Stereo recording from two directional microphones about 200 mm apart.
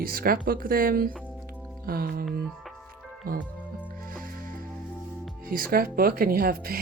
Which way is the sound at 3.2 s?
50° right (ahead or behind).